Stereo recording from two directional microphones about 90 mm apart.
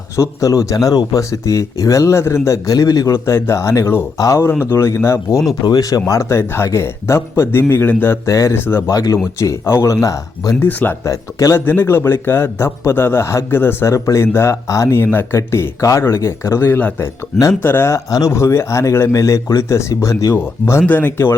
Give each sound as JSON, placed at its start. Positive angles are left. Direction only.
{"t": 0.2, "sound": "a man's voice", "side_deg": 35}
{"t": 5.6, "sound": "a man's voice", "side_deg": 40}
{"t": 10.6, "sound": "a man's voice", "side_deg": 20}
{"t": 11.0, "sound": "a man's voice", "side_deg": 35}
{"t": 11.6, "sound": "a man's voice", "side_deg": 20}